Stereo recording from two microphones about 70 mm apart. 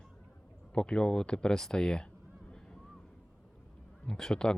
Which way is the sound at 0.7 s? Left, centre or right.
Centre.